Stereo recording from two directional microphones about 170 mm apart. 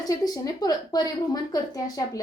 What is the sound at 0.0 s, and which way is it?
A woman's voice, 20° left (ahead or behind).